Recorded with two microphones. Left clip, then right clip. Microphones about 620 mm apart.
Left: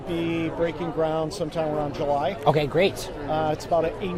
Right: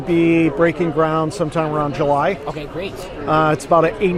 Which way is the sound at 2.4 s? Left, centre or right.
Left.